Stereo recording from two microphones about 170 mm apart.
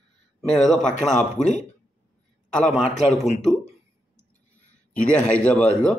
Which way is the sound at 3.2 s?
40° left (ahead or behind).